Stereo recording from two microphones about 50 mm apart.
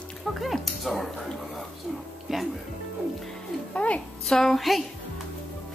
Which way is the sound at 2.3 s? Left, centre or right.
Centre.